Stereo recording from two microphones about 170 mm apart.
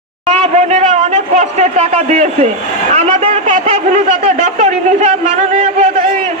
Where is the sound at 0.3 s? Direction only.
40° right (ahead or behind).